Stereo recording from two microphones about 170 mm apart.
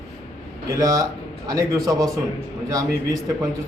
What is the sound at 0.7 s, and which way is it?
A man's voice, 20° right (ahead or behind).